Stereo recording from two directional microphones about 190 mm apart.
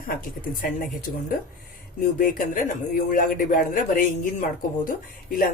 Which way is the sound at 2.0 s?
50° left (ahead or behind).